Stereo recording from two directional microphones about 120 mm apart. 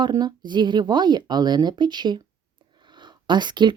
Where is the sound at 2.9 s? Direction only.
40° right (ahead or behind).